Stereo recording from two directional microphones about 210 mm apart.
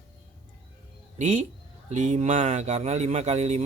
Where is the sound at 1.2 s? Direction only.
35° right (ahead or behind).